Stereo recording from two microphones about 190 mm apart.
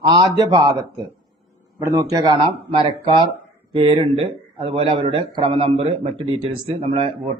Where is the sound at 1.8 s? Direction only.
15° right (ahead or behind).